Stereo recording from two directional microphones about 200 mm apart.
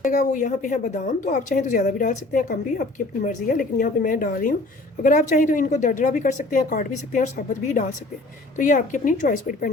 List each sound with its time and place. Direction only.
0.0 s a woman's voice: 40° left (ahead or behind)